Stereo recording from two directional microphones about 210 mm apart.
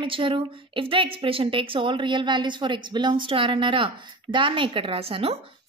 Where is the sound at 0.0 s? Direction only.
25° right (ahead or behind).